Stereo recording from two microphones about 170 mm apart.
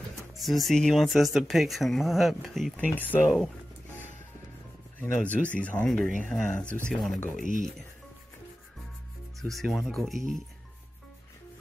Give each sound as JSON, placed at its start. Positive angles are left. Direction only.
{"t": 0.4, "sound": "speech", "side_deg": 0}
{"t": 5.0, "sound": "speech", "side_deg": 10}
{"t": 7.3, "sound": "speech", "side_deg": 50}
{"t": 9.4, "sound": "speech", "side_deg": 0}